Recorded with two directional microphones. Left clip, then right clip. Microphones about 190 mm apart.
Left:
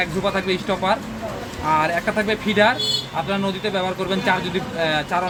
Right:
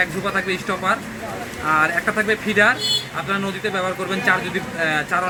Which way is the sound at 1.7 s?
30° left (ahead or behind).